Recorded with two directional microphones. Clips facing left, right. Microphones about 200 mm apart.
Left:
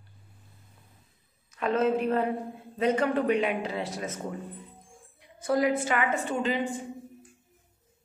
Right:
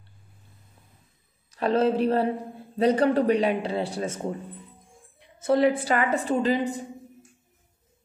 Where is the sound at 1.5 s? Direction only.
35° right (ahead or behind).